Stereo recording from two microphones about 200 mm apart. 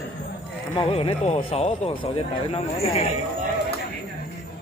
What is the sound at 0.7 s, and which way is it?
Speech, 25° left (ahead or behind).